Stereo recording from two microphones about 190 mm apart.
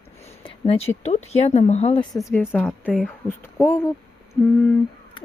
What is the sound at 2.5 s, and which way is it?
A woman's voice, 5° left (ahead or behind).